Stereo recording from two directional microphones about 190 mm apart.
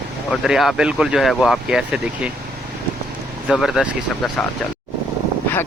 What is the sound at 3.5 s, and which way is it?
Speech, centre (ahead or behind).